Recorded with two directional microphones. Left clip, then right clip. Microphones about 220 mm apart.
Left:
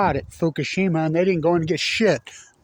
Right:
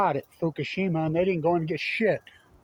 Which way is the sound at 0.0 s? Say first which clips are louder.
Left 4 dB; 55° left (ahead or behind).